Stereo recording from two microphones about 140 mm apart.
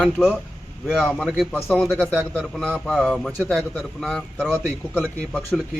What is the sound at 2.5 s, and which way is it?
A man's voice, centre (ahead or behind).